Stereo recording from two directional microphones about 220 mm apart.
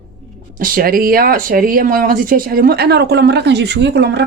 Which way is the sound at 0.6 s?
40° right (ahead or behind).